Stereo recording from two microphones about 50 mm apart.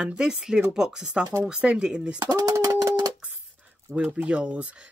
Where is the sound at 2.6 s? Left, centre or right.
Right.